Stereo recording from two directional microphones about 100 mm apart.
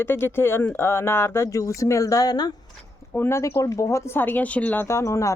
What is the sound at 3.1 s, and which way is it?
Speech, 25° left (ahead or behind).